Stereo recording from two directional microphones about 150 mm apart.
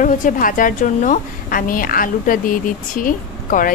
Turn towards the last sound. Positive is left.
turn(degrees=65)  # may be behind; listen again after turning